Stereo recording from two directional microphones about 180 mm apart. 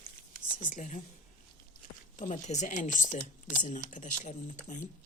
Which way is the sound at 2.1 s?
40° left (ahead or behind).